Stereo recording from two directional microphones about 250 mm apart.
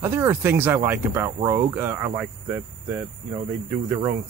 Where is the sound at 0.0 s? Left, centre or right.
Centre.